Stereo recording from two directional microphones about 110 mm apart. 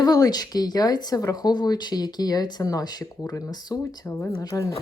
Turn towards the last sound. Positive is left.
turn(degrees=30)  # may be behind; listen again after turning